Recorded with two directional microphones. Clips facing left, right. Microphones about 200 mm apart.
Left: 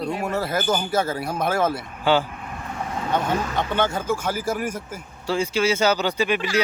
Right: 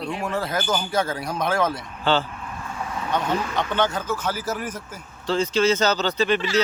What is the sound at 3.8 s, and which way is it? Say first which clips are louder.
Speech: left 1 dB; 10° left (ahead or behind).